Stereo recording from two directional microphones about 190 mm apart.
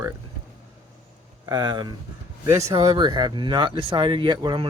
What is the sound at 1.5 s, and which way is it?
Speech, 20° right (ahead or behind).